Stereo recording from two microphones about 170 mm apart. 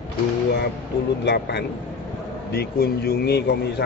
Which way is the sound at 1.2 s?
75° left (ahead or behind).